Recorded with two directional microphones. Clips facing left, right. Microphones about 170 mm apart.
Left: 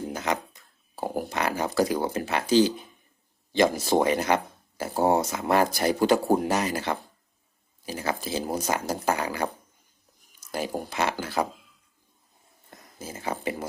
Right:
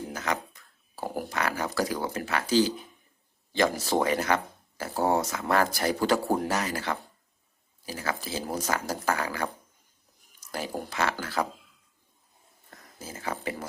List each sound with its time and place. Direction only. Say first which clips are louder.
0.1 s speech: left 2 dB; 20° left (ahead or behind)
10.5 s speech: left 3 dB; 15° left (ahead or behind)
12.7 s speech: left 3 dB; 20° left (ahead or behind)